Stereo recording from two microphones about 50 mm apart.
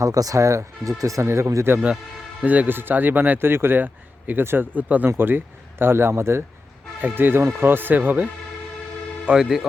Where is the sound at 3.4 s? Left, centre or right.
Right.